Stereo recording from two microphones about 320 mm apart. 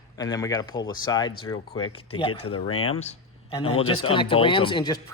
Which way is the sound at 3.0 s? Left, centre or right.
Centre.